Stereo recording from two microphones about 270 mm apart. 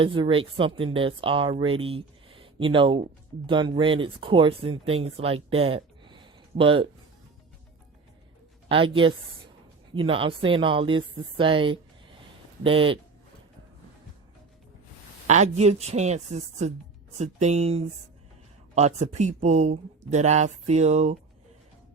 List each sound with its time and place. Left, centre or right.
0.0 s speech: centre
8.7 s speech: centre
15.3 s speech: right